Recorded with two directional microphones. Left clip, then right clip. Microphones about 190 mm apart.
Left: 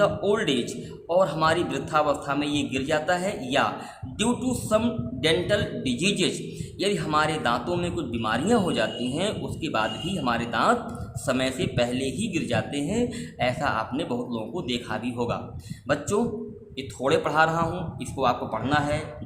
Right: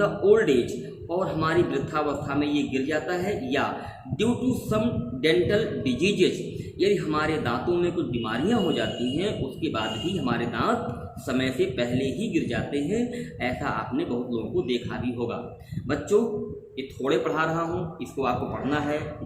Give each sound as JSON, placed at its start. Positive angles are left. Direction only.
{"t": 0.0, "sound": "a man's voice", "side_deg": 55}
{"t": 17.0, "sound": "a man's voice", "side_deg": 50}